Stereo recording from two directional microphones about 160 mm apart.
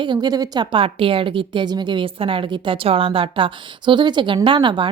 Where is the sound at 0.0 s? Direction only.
25° right (ahead or behind).